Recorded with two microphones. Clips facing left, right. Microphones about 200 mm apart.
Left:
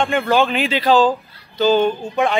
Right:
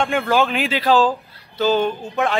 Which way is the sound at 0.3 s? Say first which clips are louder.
Left 2 dB; 5° right (ahead or behind).